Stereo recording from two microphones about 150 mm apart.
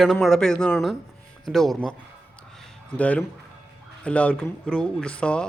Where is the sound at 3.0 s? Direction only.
10° left (ahead or behind).